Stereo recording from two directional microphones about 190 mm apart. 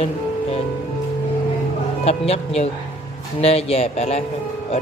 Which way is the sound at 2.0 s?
35° left (ahead or behind).